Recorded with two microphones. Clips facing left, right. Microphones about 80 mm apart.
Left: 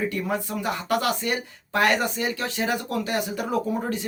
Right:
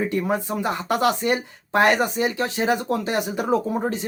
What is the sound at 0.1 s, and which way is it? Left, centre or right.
Speech, right.